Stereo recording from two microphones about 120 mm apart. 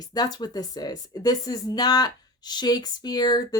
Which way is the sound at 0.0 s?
35° left (ahead or behind).